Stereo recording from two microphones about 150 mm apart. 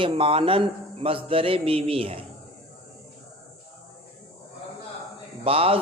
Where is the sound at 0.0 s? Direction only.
35° right (ahead or behind).